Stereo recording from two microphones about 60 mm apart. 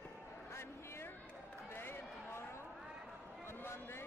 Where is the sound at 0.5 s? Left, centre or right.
Left.